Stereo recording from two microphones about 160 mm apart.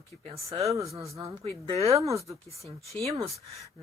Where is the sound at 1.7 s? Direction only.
40° right (ahead or behind).